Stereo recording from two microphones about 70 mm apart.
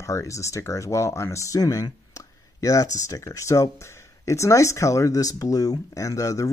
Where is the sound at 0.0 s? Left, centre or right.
Left.